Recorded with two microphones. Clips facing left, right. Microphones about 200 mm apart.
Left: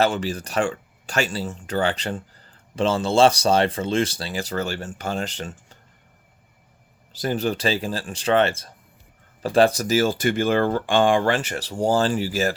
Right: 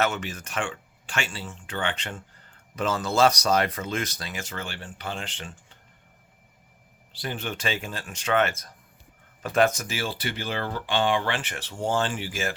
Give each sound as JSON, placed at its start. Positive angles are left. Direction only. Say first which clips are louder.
{"t": 0.0, "sound": "speech", "louder": "left 6 dB", "side_deg": 35}
{"t": 7.1, "sound": "speech", "louder": "left 9 dB", "side_deg": 40}